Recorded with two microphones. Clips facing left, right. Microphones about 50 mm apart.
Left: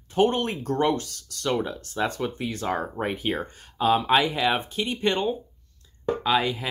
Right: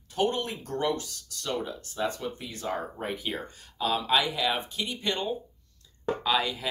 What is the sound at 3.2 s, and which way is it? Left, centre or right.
Speech, left.